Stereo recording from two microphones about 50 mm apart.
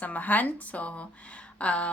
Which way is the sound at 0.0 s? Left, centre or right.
Left.